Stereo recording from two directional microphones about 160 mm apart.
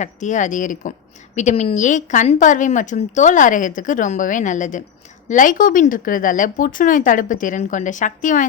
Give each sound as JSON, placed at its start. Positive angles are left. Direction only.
{"t": 0.0, "sound": "a woman's voice", "side_deg": 50}